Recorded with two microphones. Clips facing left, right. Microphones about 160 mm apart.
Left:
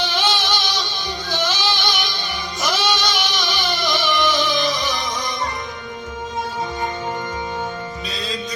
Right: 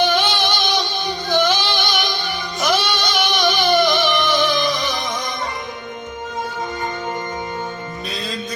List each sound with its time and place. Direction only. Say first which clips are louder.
0.0 s music: right 4 dB; 55° right (ahead or behind)